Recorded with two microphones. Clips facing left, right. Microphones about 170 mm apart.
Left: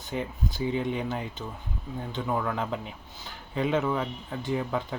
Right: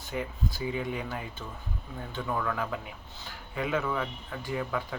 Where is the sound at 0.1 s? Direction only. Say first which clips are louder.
Left 2 dB; 20° left (ahead or behind).